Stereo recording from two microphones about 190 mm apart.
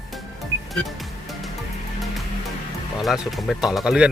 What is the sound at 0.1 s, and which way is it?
Music, centre (ahead or behind).